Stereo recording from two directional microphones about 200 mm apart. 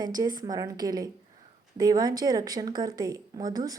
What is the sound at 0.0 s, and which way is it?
Speech, 20° right (ahead or behind).